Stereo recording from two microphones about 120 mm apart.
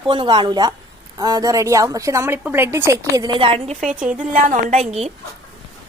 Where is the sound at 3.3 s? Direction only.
45° right (ahead or behind).